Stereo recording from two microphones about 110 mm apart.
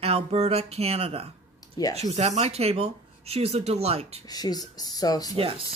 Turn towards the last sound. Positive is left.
turn(degrees=-55)  # may be behind; listen again after turning